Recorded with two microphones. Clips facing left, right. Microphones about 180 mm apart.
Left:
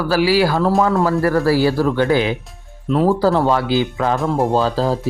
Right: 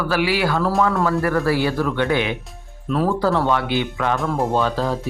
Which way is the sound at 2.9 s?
20° left (ahead or behind).